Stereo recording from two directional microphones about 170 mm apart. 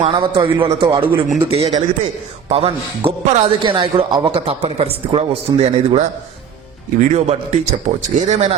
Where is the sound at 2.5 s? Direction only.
35° right (ahead or behind).